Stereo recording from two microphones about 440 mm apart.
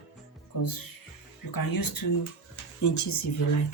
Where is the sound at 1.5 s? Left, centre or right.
Left.